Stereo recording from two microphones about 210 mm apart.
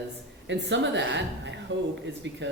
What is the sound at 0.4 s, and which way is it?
A man's voice, 55° right (ahead or behind).